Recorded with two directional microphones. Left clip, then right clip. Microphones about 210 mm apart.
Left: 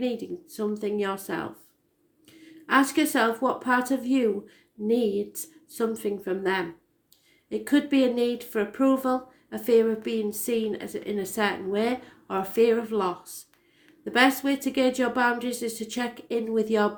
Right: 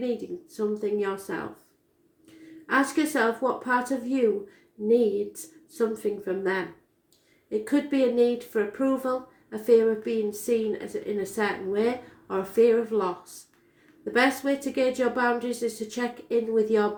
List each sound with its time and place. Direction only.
0.5 s speech: 40° left (ahead or behind)